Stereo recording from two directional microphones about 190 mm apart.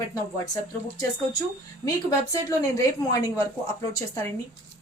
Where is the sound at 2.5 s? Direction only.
15° left (ahead or behind).